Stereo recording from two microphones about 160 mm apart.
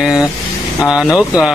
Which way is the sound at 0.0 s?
5° right (ahead or behind).